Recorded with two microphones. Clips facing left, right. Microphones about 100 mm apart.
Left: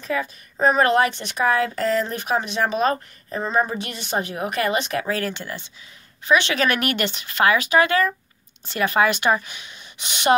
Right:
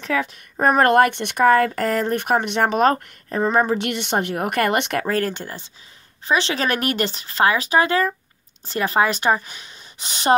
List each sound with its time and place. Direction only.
0.0 s speech: 70° right (ahead or behind); by 10.3 s 35° right (ahead or behind)